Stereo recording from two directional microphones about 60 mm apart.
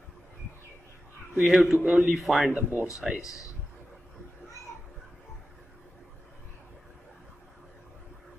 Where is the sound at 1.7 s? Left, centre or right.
Centre.